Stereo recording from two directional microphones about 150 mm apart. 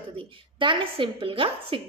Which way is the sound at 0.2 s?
35° right (ahead or behind).